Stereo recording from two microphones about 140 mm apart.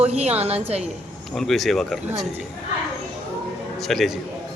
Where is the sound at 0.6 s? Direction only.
50° right (ahead or behind).